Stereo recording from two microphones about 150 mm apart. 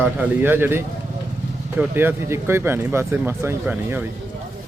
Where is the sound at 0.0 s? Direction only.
15° right (ahead or behind).